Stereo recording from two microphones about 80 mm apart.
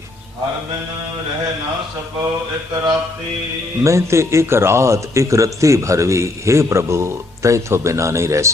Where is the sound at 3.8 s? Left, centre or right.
Right.